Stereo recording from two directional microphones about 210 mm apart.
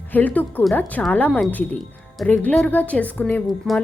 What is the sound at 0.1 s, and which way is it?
Speech, 10° left (ahead or behind).